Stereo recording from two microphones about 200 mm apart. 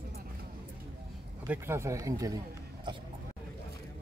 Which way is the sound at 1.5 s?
15° right (ahead or behind).